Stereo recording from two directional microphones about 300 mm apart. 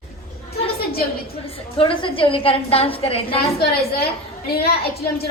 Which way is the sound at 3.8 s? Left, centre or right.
Left.